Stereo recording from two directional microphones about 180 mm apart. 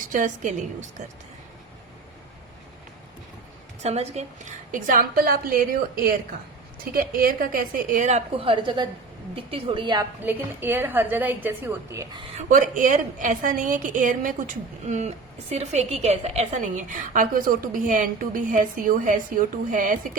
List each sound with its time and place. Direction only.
0.1 s a woman's voice: 45° right (ahead or behind)
3.8 s a woman's voice: 35° right (ahead or behind)
10.2 s a woman's voice: 10° right (ahead or behind)
12.4 s a woman's voice: 45° right (ahead or behind)